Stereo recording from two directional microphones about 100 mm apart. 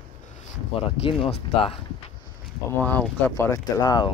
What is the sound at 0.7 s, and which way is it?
Speech, 70° left (ahead or behind).